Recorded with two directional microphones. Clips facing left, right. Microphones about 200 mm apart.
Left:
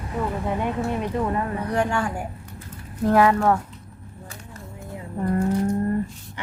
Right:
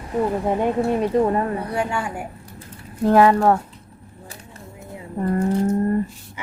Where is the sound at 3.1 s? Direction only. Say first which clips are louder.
Right 3 dB; 30° right (ahead or behind).